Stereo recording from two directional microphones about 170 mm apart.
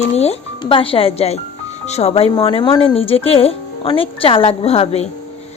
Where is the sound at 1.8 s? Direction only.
40° left (ahead or behind).